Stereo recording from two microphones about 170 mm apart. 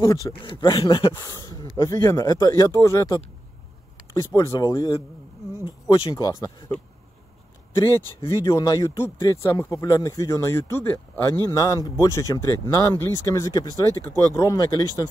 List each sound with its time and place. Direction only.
0.0 s speech: 25° left (ahead or behind)
7.7 s speech: 15° left (ahead or behind)